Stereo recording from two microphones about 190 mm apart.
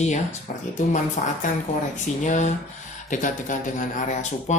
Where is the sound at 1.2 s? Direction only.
40° left (ahead or behind).